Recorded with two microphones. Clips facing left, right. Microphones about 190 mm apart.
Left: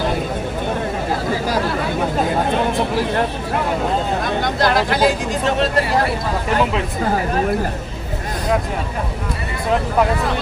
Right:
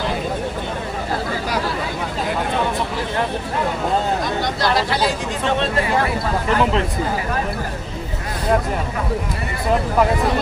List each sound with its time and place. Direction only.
4.4 s speech: 50° left (ahead or behind)